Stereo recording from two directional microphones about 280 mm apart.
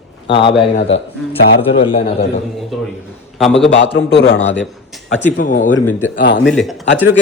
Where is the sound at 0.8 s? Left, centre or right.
Left.